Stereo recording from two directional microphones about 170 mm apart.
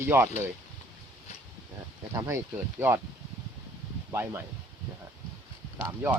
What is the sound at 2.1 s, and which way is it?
Speech, 15° right (ahead or behind).